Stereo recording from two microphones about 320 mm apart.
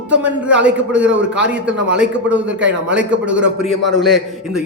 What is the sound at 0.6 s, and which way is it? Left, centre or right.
A man's voice, centre.